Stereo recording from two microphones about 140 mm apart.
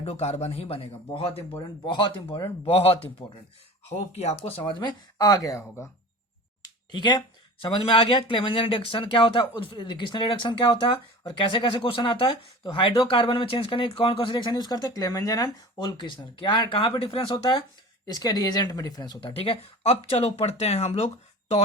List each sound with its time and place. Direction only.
0.0 s a man's voice: 45° left (ahead or behind)
2.6 s a man's voice: 45° left (ahead or behind); by 5.9 s 20° left (ahead or behind)
6.9 s speech: 30° left (ahead or behind); by 21.1 s 45° left (ahead or behind)